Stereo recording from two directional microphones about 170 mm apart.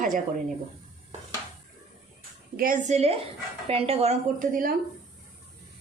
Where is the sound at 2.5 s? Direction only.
55° right (ahead or behind); by 4.5 s 40° right (ahead or behind).